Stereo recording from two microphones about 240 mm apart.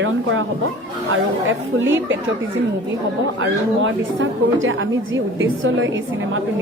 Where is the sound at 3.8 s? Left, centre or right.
Right.